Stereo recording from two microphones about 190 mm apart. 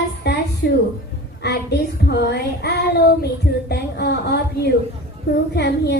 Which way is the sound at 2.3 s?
60° left (ahead or behind).